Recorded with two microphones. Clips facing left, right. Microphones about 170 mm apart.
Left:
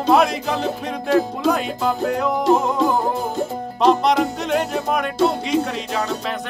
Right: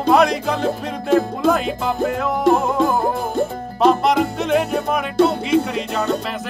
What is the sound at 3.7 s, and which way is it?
Music, centre (ahead or behind).